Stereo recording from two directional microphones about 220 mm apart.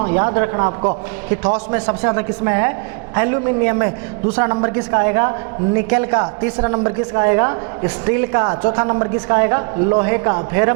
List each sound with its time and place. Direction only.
0.0 s a man's voice: 20° right (ahead or behind)
1.5 s a woman's voice: 10° right (ahead or behind)